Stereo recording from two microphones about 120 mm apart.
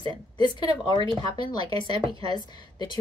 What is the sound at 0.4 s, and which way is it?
A woman's voice, 40° left (ahead or behind).